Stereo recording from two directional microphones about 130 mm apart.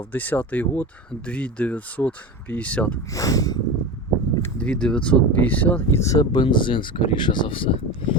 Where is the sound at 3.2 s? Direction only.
25° left (ahead or behind).